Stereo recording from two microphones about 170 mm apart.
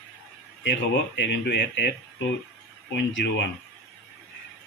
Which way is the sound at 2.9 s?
90° left.